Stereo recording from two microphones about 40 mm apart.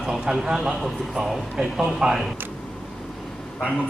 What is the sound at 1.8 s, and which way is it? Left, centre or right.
Speech, centre.